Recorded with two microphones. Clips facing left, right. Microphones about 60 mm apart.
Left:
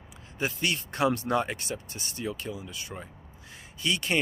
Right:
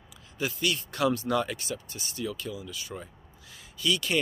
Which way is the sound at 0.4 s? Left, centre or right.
Left.